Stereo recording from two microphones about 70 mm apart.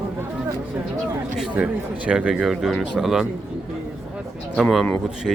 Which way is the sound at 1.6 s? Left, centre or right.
Centre.